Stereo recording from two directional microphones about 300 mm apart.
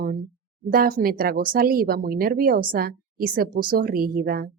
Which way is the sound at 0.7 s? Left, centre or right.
Right.